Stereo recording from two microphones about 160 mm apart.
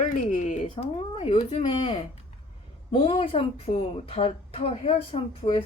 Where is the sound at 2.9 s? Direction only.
35° left (ahead or behind).